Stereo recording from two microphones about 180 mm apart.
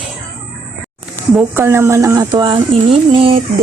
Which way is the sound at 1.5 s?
15° right (ahead or behind).